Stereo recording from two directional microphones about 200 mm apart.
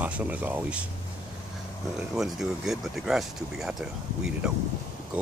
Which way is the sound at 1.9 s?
Centre (ahead or behind).